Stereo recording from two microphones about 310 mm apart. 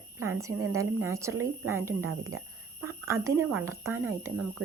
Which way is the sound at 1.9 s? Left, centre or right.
Right.